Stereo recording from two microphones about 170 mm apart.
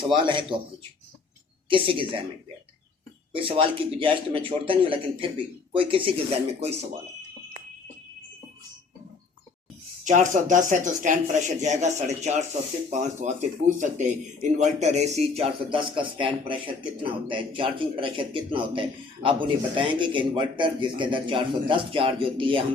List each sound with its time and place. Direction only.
0.1 s speech: 30° right (ahead or behind)
1.7 s speech: 30° right (ahead or behind)
3.3 s speech: 30° right (ahead or behind)
10.0 s speech: 45° right (ahead or behind); by 22.6 s 30° right (ahead or behind)